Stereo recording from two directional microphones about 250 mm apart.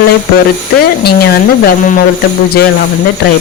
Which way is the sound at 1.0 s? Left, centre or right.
Left.